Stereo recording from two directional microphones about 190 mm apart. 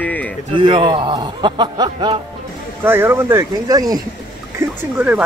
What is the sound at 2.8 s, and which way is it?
Speech, 10° right (ahead or behind).